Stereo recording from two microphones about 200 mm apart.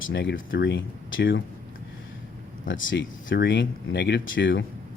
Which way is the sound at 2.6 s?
65° left (ahead or behind).